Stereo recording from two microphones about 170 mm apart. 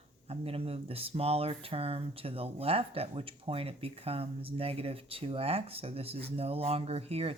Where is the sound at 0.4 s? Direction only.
35° right (ahead or behind).